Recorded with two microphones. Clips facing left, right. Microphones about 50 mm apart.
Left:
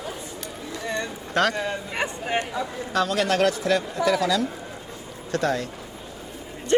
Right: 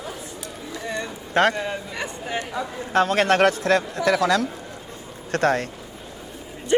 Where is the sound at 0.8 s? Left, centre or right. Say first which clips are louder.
Left 1 dB; centre.